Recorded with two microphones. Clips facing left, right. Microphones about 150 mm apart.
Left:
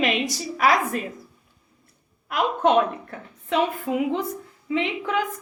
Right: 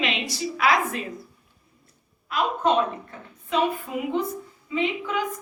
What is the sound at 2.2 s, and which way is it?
A woman's voice, 60° left (ahead or behind).